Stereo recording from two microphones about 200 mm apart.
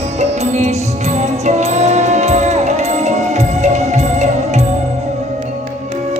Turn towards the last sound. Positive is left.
turn(degrees=-35)  # may be behind; listen again after turning